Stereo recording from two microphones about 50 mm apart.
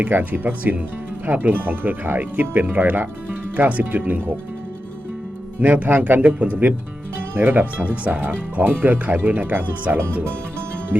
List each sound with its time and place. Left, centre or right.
0.1 s speech: right
5.5 s speech: right
7.3 s speech: right
8.1 s speech: right